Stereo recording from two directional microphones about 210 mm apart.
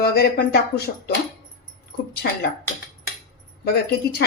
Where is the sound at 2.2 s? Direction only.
50° left (ahead or behind).